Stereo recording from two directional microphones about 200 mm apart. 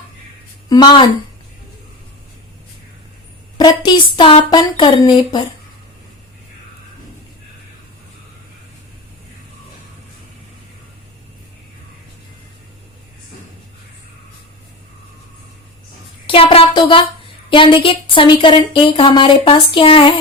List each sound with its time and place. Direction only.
0.7 s a woman's voice: 20° left (ahead or behind)
3.6 s a woman's voice: 25° left (ahead or behind)
16.2 s a sound: 25° left (ahead or behind)
17.5 s a woman's voice: 25° left (ahead or behind)